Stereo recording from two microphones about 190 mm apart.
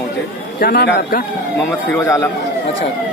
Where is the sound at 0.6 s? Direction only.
55° left (ahead or behind).